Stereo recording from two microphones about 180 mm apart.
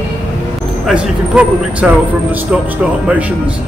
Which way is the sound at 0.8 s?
5° right (ahead or behind).